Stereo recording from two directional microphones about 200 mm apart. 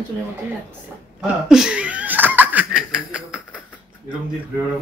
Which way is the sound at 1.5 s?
5° right (ahead or behind).